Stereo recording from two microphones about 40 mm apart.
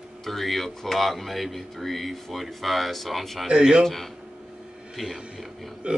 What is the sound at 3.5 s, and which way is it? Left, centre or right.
Speech, centre.